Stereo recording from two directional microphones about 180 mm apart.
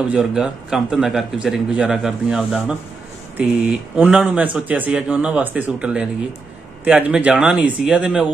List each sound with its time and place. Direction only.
0.1 s a man's voice: 5° right (ahead or behind)